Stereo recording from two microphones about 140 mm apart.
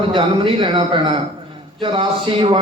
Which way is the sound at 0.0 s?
40° right (ahead or behind).